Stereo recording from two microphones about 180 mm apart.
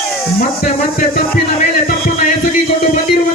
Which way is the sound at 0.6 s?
45° left (ahead or behind).